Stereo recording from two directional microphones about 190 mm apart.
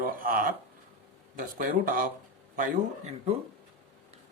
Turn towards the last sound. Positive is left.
turn(degrees=-35)  # may be behind; listen again after turning